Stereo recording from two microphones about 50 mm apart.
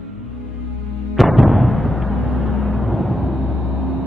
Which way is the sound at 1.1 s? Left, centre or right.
Centre.